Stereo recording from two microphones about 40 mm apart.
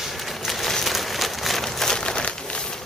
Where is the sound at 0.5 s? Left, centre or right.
Centre.